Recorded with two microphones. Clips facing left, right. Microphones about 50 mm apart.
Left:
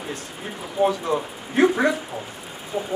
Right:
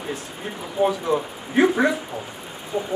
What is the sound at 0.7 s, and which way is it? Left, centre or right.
Speech, centre.